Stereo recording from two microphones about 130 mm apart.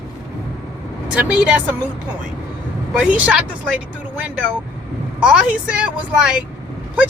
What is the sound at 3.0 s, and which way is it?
Speech, 10° right (ahead or behind).